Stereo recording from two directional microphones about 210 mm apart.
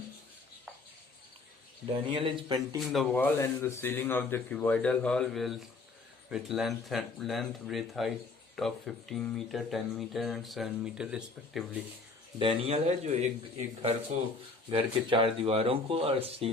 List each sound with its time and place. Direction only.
1.9 s speech: 25° right (ahead or behind)
2.9 s speech: centre (ahead or behind)
12.4 s speech: 25° right (ahead or behind)
14.7 s speech: 25° right (ahead or behind)